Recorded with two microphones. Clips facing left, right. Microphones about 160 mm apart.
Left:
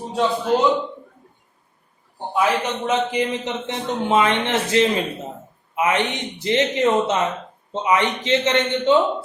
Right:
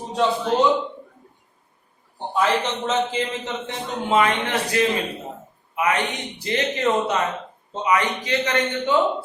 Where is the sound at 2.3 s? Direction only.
10° left (ahead or behind).